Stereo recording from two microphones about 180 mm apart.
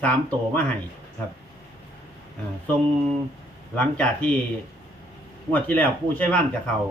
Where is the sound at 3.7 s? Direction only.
5° left (ahead or behind).